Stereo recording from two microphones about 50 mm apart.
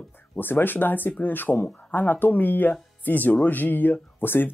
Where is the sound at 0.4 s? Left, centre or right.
Left.